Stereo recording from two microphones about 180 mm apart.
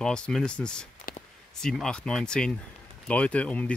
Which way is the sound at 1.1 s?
50° left (ahead or behind).